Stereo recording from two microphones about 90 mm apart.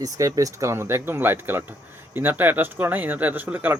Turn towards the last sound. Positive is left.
turn(degrees=-20)  # may be behind; listen again after turning